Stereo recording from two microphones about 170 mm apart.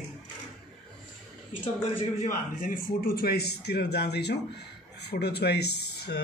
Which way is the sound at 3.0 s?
60° left (ahead or behind).